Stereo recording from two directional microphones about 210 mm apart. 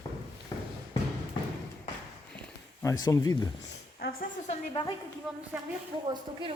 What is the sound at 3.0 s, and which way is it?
Speech, 15° left (ahead or behind).